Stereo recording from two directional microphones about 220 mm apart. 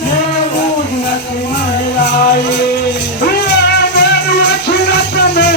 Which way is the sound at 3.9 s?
50° left (ahead or behind).